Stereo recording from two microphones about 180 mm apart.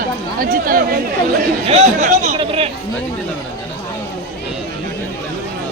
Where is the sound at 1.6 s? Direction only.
40° right (ahead or behind).